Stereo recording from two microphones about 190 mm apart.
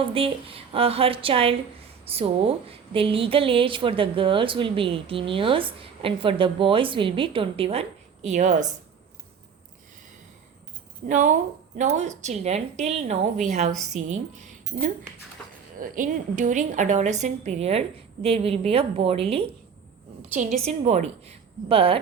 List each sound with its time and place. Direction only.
0.0 s a woman's voice: 30° right (ahead or behind)
11.1 s a woman's voice: 40° right (ahead or behind)